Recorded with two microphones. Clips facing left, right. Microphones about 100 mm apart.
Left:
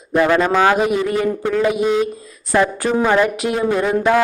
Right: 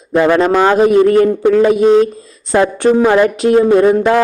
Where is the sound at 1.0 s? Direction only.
55° right (ahead or behind).